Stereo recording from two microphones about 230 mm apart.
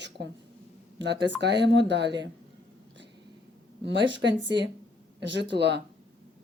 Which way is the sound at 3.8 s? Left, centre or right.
Right.